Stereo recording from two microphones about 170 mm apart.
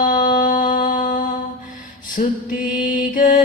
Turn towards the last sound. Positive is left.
turn(degrees=50)  # may be behind; listen again after turning